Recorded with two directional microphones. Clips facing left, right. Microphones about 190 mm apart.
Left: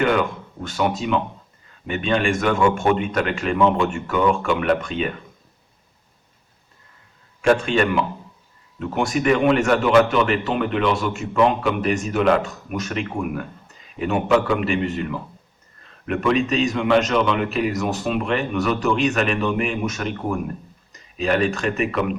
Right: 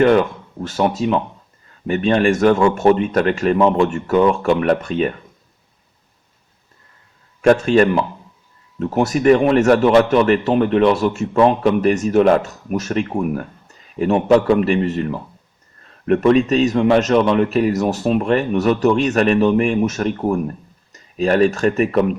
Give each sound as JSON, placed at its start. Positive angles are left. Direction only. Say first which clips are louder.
{"t": 0.0, "sound": "a man's voice", "louder": "right 6 dB", "side_deg": -35}
{"t": 7.4, "sound": "a man's voice", "louder": "right 5 dB", "side_deg": -40}
{"t": 16.3, "sound": "a man's voice", "louder": "right 3 dB", "side_deg": -40}